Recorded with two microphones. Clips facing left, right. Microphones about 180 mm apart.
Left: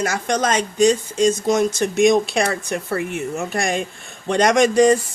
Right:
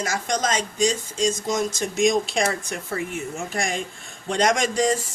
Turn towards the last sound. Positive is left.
turn(degrees=60)  # may be behind; listen again after turning